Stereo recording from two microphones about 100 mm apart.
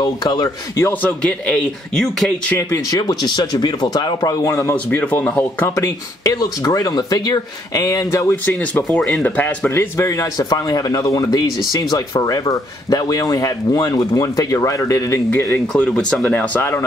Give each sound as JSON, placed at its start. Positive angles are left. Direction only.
{"t": 0.0, "sound": "speech", "side_deg": 45}
{"t": 1.0, "sound": "speech", "side_deg": 10}
{"t": 2.7, "sound": "speech", "side_deg": 40}
{"t": 5.8, "sound": "speech", "side_deg": 35}
{"t": 8.7, "sound": "speech", "side_deg": 15}
{"t": 10.5, "sound": "speech", "side_deg": 40}
{"t": 15.7, "sound": "speech", "side_deg": 10}